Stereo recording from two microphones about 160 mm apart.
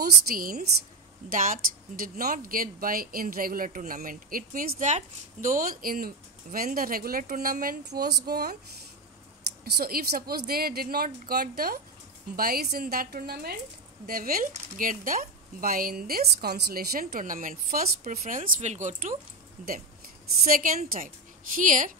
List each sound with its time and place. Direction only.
0.0 s speech: 65° right (ahead or behind)
9.7 s speech: 80° right; by 18.2 s 65° right (ahead or behind)
18.2 s speech: 50° right (ahead or behind)
20.4 s speech: 60° right (ahead or behind)